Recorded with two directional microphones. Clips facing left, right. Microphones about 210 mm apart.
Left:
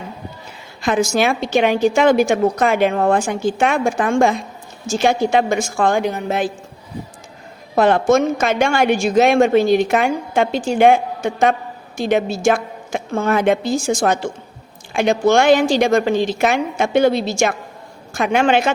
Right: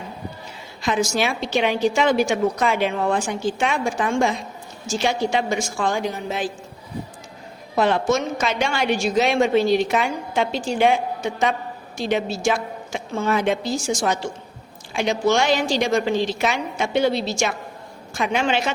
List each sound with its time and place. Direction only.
0.8 s a woman's voice: 55° left (ahead or behind)
7.8 s a woman's voice: 50° left (ahead or behind)